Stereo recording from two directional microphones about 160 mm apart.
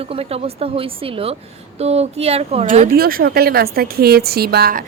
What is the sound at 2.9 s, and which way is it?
A woman's voice, 70° right (ahead or behind).